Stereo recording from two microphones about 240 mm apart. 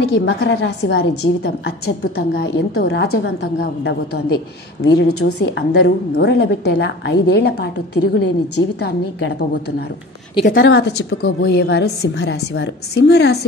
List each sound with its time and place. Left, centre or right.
0.1 s a woman's voice: left
10.6 s a woman's voice: left